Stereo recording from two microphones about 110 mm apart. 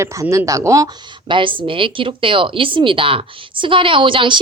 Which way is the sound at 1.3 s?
50° right (ahead or behind).